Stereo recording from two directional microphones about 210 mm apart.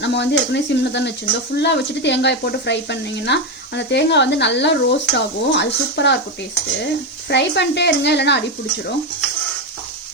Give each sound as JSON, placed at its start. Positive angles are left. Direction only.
{"t": 0.0, "sound": "speech", "side_deg": 55}
{"t": 7.3, "sound": "speech", "side_deg": 55}